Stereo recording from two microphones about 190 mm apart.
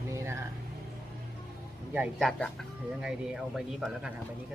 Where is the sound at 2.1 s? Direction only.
Centre (ahead or behind).